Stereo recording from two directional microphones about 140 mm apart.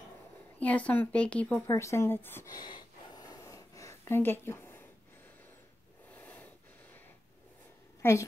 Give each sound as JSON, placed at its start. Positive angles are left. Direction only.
{"t": 0.6, "sound": "speech", "side_deg": 10}
{"t": 1.7, "sound": "speech", "side_deg": 20}
{"t": 2.5, "sound": "gasp", "side_deg": 30}
{"t": 6.1, "sound": "a sound", "side_deg": 10}
{"t": 8.0, "sound": "a woman's voice", "side_deg": 20}